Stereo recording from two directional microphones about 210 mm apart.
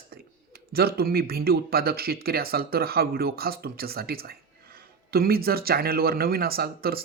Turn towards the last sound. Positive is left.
turn(degrees=-45)  # may be behind; listen again after turning